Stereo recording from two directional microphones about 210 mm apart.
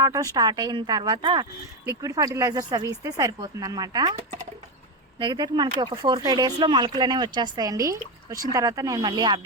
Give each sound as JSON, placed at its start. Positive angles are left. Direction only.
{"t": 0.0, "sound": "speech", "side_deg": -15}
{"t": 5.2, "sound": "speech", "side_deg": -20}